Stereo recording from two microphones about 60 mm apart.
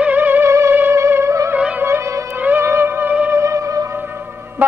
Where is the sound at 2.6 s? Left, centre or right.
Right.